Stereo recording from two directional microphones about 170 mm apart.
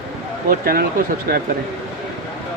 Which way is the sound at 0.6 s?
60° right (ahead or behind).